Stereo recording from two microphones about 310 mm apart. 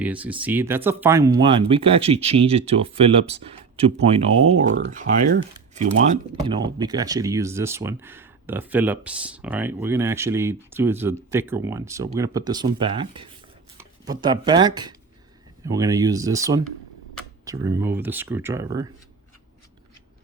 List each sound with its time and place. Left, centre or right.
0.0 s speech: centre
4.8 s speech: right